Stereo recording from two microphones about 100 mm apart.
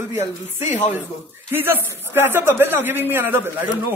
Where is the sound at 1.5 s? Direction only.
20° right (ahead or behind).